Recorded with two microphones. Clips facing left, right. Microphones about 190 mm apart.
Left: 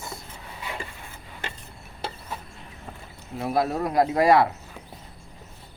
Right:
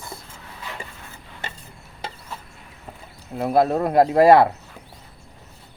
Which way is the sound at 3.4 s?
60° right (ahead or behind).